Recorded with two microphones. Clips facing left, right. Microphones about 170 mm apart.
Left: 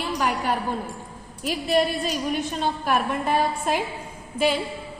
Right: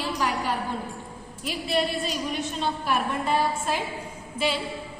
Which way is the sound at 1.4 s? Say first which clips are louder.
Left 4 dB; 40° left (ahead or behind).